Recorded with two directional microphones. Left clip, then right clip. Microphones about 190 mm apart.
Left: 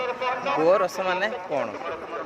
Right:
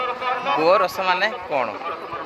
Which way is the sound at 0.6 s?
10° left (ahead or behind).